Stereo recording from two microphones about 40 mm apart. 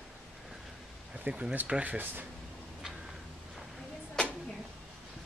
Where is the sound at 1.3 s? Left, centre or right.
Right.